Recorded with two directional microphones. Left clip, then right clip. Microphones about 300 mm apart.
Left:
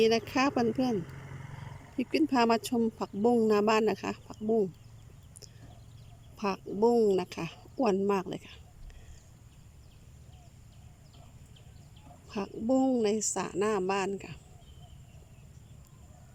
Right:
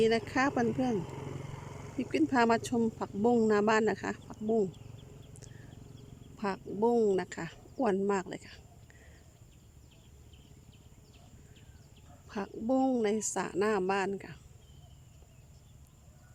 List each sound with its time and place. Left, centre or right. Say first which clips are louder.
0.0 s a man's voice: left 2 dB; centre
0.9 s vehicle: even; right
2.0 s a man's voice: left 1 dB; centre
6.3 s a man's voice: left 3 dB; centre
12.3 s a man's voice: left 2 dB; centre